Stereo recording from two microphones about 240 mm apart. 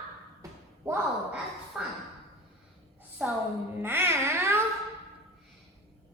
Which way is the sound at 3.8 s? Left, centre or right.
Centre.